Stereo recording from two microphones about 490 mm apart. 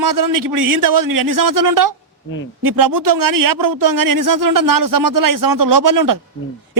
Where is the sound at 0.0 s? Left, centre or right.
Right.